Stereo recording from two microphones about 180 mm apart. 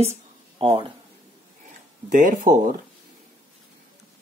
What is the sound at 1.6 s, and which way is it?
Speech, 45° right (ahead or behind).